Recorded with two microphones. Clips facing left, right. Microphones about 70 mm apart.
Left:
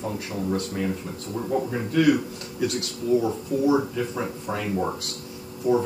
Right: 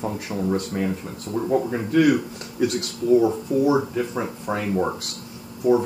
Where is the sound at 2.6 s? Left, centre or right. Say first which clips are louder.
Right 4 dB; right.